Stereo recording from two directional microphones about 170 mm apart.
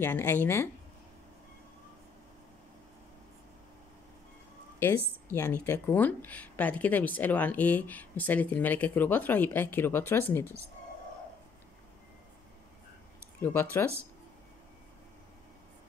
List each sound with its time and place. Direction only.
0.0 s speech: 15° left (ahead or behind)
5.3 s speech: 15° left (ahead or behind)
13.4 s speech: 15° left (ahead or behind)